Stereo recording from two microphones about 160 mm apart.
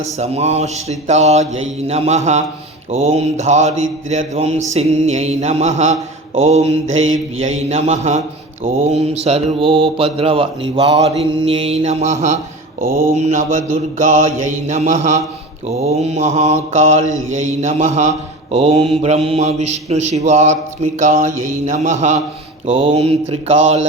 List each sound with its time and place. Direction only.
0.2 s mantra: 40° right (ahead or behind)
22.7 s mantra: 35° right (ahead or behind)